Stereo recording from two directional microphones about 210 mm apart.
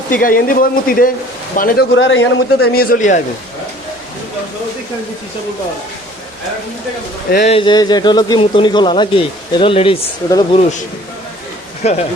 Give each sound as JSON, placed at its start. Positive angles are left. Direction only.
{"t": 0.2, "sound": "a man's voice", "side_deg": 40}
{"t": 2.0, "sound": "a man's voice", "side_deg": 60}
{"t": 2.7, "sound": "speech", "side_deg": 40}
{"t": 7.3, "sound": "speech", "side_deg": 40}
{"t": 7.5, "sound": "speech", "side_deg": 20}
{"t": 11.8, "sound": "speech", "side_deg": 30}